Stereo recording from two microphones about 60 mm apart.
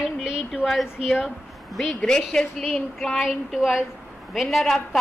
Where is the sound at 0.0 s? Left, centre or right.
Centre.